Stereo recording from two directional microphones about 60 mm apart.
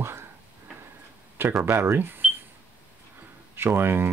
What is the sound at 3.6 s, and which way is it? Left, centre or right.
Speech, right.